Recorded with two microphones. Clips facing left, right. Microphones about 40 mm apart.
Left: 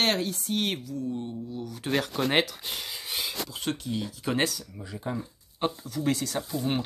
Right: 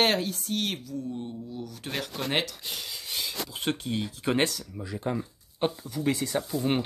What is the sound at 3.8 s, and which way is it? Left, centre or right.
Speech, right.